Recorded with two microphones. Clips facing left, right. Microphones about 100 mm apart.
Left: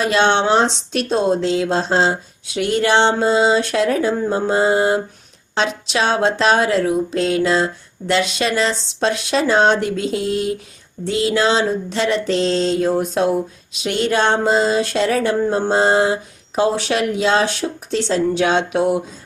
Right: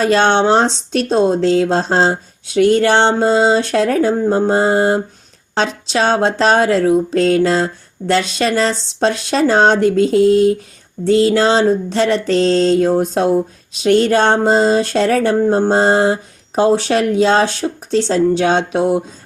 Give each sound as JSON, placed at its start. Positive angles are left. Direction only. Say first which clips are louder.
{"t": 0.0, "sound": "speech", "louder": "right 3 dB", "side_deg": -40}